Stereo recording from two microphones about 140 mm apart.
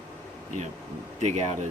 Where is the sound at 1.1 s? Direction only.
55° right (ahead or behind).